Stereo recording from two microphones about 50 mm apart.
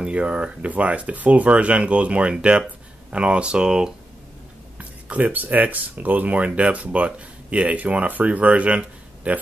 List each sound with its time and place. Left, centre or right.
0.0 s speech: right
4.7 s speech: right